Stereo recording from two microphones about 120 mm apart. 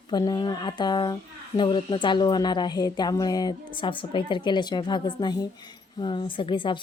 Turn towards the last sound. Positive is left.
turn(degrees=40)  # may be behind; listen again after turning